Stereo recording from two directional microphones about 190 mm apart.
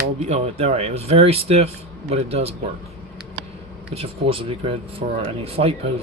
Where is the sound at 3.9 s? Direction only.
30° right (ahead or behind).